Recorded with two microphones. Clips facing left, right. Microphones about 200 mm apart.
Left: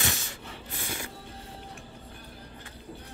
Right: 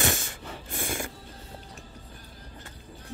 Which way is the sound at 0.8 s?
50° right (ahead or behind).